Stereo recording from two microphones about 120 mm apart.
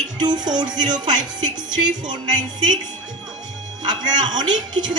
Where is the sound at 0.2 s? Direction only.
35° right (ahead or behind).